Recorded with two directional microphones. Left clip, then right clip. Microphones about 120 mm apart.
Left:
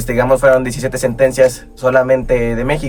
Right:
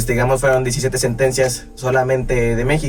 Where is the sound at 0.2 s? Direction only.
20° left (ahead or behind).